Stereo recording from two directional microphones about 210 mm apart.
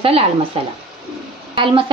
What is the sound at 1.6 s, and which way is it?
Speech, 25° right (ahead or behind).